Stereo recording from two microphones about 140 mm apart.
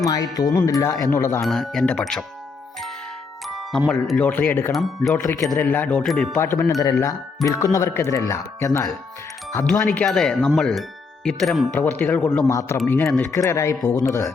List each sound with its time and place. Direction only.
0.0 s speech: 25° left (ahead or behind)
1.4 s speech: centre (ahead or behind)
3.4 s speech: centre (ahead or behind)
4.7 s speech: centre (ahead or behind)
5.1 s speech: 15° left (ahead or behind)
6.3 s speech: 20° left (ahead or behind)
9.6 s speech: 5° left (ahead or behind)
11.7 s speech: 10° left (ahead or behind)
12.5 s speech: 20° left (ahead or behind)